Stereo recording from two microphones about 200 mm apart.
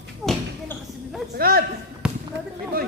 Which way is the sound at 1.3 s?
50° right (ahead or behind).